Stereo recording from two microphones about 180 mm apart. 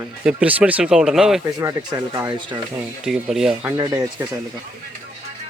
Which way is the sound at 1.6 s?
15° right (ahead or behind).